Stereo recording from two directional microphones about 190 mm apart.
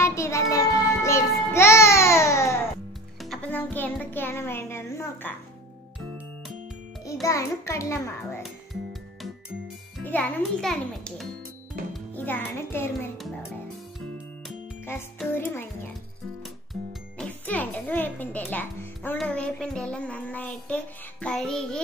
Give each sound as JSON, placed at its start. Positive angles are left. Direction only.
{"t": 0.0, "sound": "child singing", "side_deg": 15}
{"t": 3.2, "sound": "a child's voice", "side_deg": 5}
{"t": 7.2, "sound": "a child's voice", "side_deg": 15}
{"t": 9.9, "sound": "a child's voice", "side_deg": 5}
{"t": 12.3, "sound": "a child's voice", "side_deg": 10}
{"t": 15.3, "sound": "a child's voice", "side_deg": 10}
{"t": 17.2, "sound": "a child's voice", "side_deg": 10}